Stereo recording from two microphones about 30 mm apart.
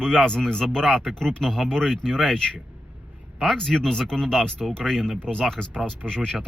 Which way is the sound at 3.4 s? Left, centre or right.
Centre.